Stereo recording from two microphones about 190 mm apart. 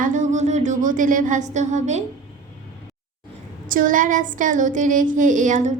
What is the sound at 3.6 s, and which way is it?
A woman's voice, 45° right (ahead or behind).